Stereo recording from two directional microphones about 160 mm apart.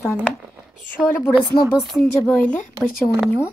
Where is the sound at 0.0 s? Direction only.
15° left (ahead or behind).